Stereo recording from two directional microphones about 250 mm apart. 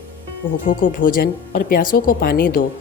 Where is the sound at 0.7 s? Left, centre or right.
Left.